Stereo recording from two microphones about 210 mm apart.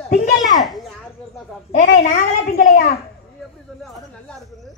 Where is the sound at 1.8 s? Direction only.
40° left (ahead or behind).